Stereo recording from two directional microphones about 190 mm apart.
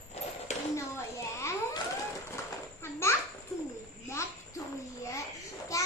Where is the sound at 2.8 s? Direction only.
15° left (ahead or behind).